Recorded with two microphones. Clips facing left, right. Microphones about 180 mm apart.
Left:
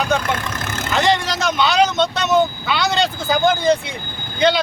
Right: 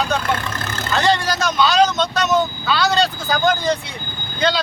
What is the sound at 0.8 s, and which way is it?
Speech, 20° left (ahead or behind).